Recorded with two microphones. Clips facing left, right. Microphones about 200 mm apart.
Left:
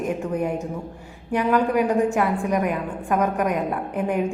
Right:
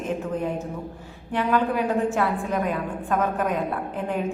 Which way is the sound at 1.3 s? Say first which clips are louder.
Left 3 dB; 15° left (ahead or behind).